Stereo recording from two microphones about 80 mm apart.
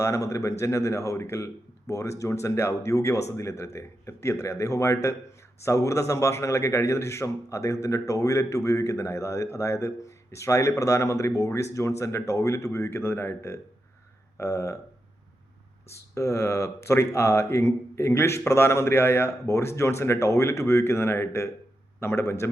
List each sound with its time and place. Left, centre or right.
0.0 s speech: left
15.9 s speech: left